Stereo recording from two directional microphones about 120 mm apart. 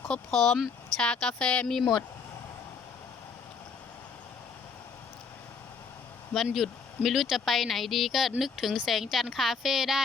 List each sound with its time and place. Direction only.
0.1 s speech: 5° left (ahead or behind)
1.8 s speech: 40° left (ahead or behind)
6.3 s speech: centre (ahead or behind)